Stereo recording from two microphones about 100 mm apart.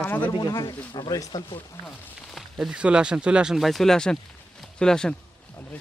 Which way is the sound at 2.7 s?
10° right (ahead or behind).